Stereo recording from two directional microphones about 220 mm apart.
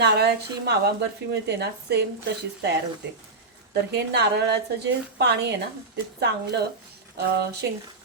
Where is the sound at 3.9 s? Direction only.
50° right (ahead or behind).